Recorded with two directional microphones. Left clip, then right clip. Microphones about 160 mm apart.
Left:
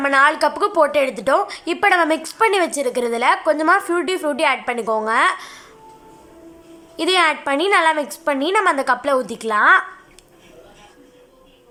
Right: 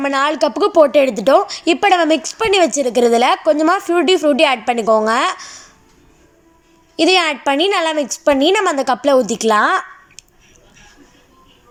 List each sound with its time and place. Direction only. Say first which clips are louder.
0.0 s a woman's voice: left 1 dB; 20° right (ahead or behind)
6.9 s a woman's voice: right 3 dB; 15° right (ahead or behind)